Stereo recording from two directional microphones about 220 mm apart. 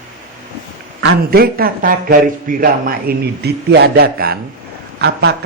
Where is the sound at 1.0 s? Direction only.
45° right (ahead or behind).